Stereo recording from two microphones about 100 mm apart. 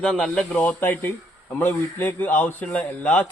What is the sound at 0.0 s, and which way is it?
A man's voice, 5° left (ahead or behind).